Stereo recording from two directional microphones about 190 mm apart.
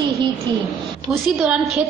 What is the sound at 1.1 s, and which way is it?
Speech, 5° right (ahead or behind).